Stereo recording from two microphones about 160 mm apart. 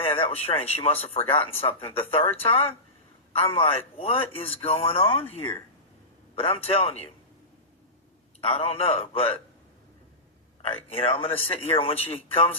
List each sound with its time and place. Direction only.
0.0 s speech: 35° left (ahead or behind)
3.3 s speech: 35° left (ahead or behind)
8.4 s speech: 40° left (ahead or behind)
10.8 s speech: 40° left (ahead or behind)